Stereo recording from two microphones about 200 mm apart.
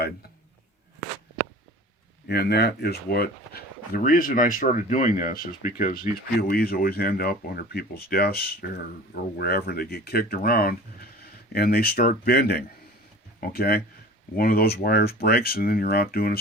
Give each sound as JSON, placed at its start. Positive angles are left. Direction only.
{"t": 2.2, "sound": "speech", "side_deg": 55}